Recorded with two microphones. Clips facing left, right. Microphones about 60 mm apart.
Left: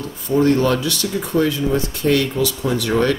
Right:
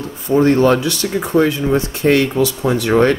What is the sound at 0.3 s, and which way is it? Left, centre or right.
Speech, right.